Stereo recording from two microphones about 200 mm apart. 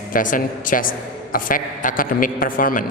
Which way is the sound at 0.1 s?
40° left (ahead or behind).